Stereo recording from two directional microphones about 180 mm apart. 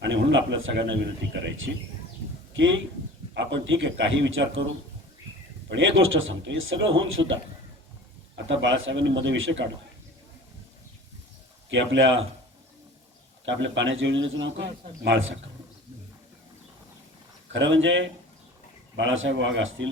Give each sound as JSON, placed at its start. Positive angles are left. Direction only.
{"t": 0.0, "sound": "a man's voice", "side_deg": -90}
{"t": 5.6, "sound": "a man's voice", "side_deg": -90}
{"t": 8.4, "sound": "a man's voice", "side_deg": -90}
{"t": 11.7, "sound": "a man's voice", "side_deg": -90}
{"t": 13.4, "sound": "a man's voice", "side_deg": -90}
{"t": 17.5, "sound": "a man's voice", "side_deg": -90}